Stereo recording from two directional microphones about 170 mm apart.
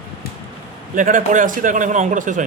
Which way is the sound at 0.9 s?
50° right (ahead or behind).